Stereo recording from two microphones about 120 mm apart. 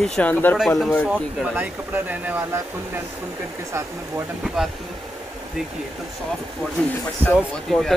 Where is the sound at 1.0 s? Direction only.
10° right (ahead or behind).